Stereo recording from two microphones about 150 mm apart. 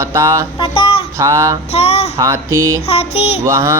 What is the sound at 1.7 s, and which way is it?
Speech, 45° left (ahead or behind).